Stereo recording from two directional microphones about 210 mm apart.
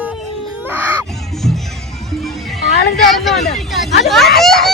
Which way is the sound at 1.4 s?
Centre (ahead or behind).